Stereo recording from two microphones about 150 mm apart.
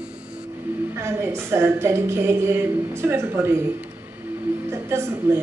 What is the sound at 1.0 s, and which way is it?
A woman's voice, 20° right (ahead or behind).